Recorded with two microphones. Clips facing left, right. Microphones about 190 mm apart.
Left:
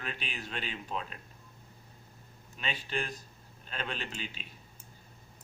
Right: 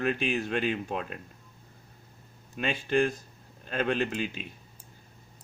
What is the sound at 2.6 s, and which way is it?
Speech, 50° right (ahead or behind).